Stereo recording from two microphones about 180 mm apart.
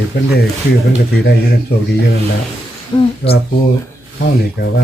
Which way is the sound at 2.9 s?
25° left (ahead or behind).